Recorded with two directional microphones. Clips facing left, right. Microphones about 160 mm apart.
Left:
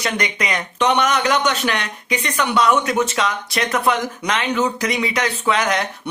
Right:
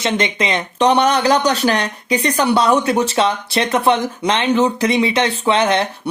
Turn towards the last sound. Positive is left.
turn(degrees=-25)  # may be behind; listen again after turning